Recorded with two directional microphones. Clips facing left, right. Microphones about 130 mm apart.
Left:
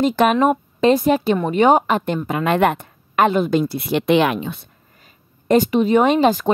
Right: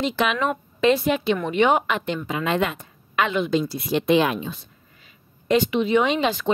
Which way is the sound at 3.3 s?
45° left (ahead or behind).